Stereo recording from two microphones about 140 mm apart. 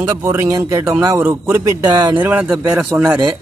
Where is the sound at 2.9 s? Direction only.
20° right (ahead or behind).